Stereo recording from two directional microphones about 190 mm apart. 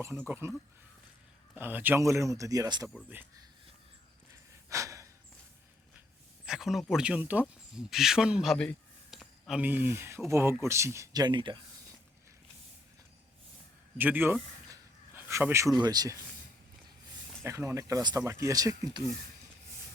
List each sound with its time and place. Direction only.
0.0 s speech: 10° right (ahead or behind)
1.5 s speech: 10° right (ahead or behind)
4.7 s gasp: 15° right (ahead or behind)
6.4 s speech: centre (ahead or behind); by 11.6 s 25° right (ahead or behind)
14.0 s speech: 10° right (ahead or behind)
14.7 s a sound: 15° right (ahead or behind)
17.4 s speech: 15° right (ahead or behind)